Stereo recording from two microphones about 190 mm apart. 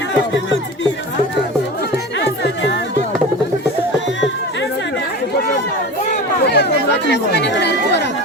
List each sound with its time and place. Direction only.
6.4 s chatter: 60° left (ahead or behind)